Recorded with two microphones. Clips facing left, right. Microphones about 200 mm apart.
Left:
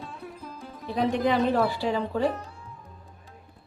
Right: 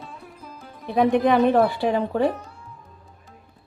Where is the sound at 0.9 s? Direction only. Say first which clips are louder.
Right 6 dB; 60° right (ahead or behind).